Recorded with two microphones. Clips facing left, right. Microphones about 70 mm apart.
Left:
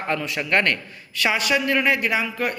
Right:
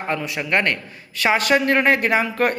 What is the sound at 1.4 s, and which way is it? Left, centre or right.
Speech, right.